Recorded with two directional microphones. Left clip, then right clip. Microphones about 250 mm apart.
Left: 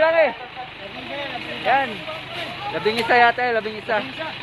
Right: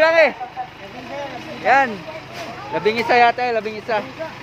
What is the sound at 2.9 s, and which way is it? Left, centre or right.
Speech, centre.